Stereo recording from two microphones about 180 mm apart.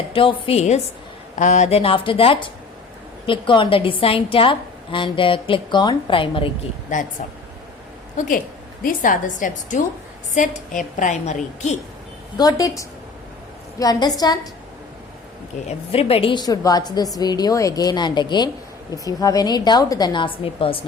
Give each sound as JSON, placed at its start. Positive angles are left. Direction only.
{"t": 0.1, "sound": "a woman's voice", "side_deg": 30}
{"t": 8.1, "sound": "a woman's voice", "side_deg": 45}
{"t": 12.4, "sound": "a woman's voice", "side_deg": 20}
{"t": 15.6, "sound": "a woman's voice", "side_deg": 35}